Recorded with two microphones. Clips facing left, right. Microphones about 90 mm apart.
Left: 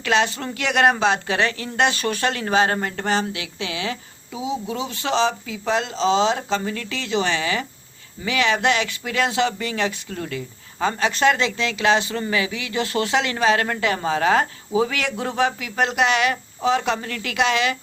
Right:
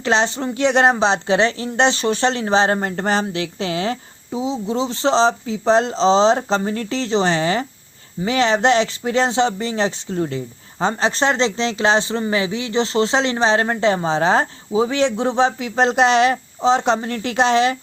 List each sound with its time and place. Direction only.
0.0 s speech: 30° right (ahead or behind)